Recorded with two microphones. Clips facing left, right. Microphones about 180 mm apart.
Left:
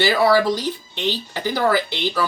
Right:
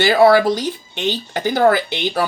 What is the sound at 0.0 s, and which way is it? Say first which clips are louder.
Speech: right 5 dB; 55° right (ahead or behind).